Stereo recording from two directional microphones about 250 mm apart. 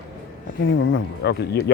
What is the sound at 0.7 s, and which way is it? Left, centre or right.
Speech, left.